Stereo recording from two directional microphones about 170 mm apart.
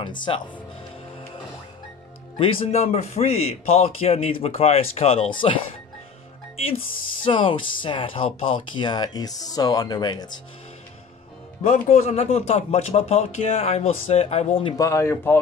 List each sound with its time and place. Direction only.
0.0 s speech: 30° left (ahead or behind)
2.3 s speech: 35° left (ahead or behind)
7.2 s speech: 30° left (ahead or behind)
11.6 s speech: 40° left (ahead or behind)
14.8 s speech: 15° left (ahead or behind)